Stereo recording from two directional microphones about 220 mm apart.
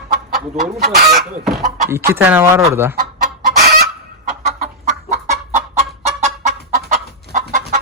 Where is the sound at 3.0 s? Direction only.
45° right (ahead or behind).